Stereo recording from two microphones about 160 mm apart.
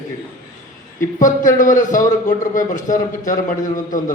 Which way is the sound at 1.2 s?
55° left (ahead or behind).